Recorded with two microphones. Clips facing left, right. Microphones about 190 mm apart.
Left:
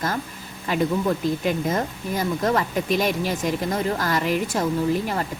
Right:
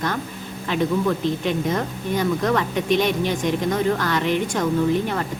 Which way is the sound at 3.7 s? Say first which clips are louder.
Right 3 dB; 35° left (ahead or behind).